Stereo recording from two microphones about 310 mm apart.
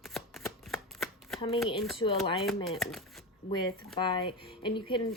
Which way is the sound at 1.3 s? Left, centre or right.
Centre.